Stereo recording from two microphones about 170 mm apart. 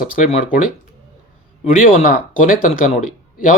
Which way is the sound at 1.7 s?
50° left (ahead or behind).